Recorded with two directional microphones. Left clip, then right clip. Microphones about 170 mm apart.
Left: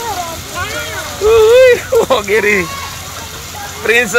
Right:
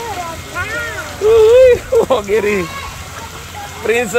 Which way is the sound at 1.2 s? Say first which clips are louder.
Left 1 dB; 5° right (ahead or behind).